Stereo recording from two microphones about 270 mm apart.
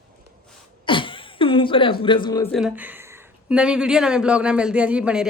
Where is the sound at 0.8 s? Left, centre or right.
Centre.